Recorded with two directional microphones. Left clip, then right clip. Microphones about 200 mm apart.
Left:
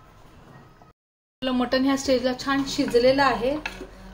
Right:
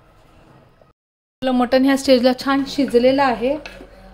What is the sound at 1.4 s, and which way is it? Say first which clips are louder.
A woman's voice: right 7 dB; 25° right (ahead or behind).